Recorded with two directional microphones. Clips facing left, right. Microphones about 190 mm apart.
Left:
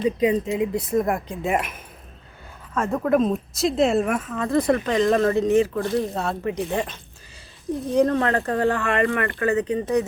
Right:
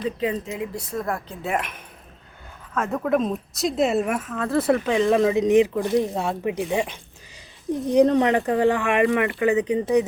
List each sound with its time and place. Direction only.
0.0 s speech: 15° left (ahead or behind)
1.5 s speech: 5° left (ahead or behind); by 10.0 s 15° right (ahead or behind)